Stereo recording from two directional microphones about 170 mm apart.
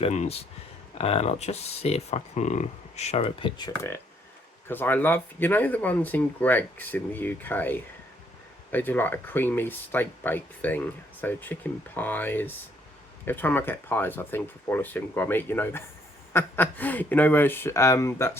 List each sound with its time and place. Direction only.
0.0 s speech: 40° left (ahead or behind)
4.7 s speech: 10° left (ahead or behind)